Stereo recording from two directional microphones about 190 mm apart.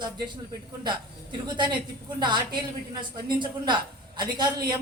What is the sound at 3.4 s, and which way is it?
A man's voice, 25° right (ahead or behind).